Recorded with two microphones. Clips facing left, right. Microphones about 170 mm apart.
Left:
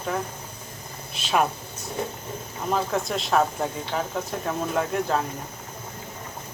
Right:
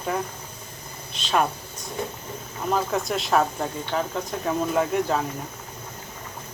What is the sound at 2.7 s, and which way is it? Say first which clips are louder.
Speech: even; centre (ahead or behind).